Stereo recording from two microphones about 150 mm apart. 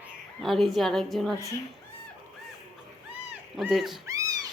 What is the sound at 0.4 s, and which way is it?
Speech, centre (ahead or behind).